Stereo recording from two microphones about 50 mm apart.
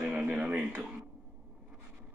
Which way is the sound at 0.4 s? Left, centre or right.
Right.